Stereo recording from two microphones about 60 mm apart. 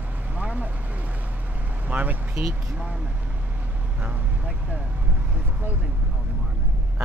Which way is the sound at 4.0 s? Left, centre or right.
Right.